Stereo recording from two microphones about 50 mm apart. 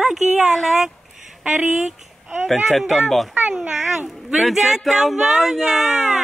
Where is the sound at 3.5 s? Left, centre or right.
Centre.